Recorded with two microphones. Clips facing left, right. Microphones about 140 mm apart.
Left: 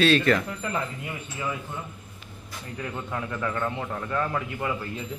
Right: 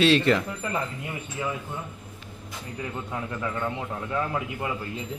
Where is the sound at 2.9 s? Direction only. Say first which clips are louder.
Left 2 dB; 5° right (ahead or behind).